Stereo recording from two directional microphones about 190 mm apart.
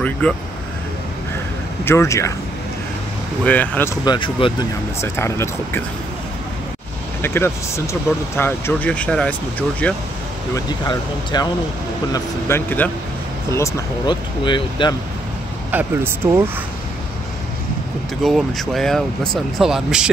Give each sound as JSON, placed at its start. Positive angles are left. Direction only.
{"t": 0.2, "sound": "speech", "side_deg": 5}
{"t": 1.9, "sound": "speech", "side_deg": 15}
{"t": 3.4, "sound": "speech", "side_deg": 10}
{"t": 5.0, "sound": "speech", "side_deg": 15}
{"t": 7.2, "sound": "speech", "side_deg": 10}
{"t": 10.5, "sound": "speech", "side_deg": 20}
{"t": 15.7, "sound": "speech", "side_deg": -10}
{"t": 18.2, "sound": "speech", "side_deg": 0}